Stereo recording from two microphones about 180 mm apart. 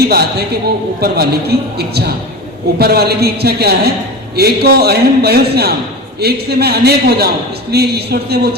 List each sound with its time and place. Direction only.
0.0 s a man's voice: 60° right (ahead or behind)